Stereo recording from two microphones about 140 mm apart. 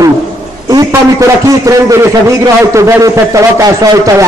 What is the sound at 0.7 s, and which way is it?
A man's voice, 25° right (ahead or behind).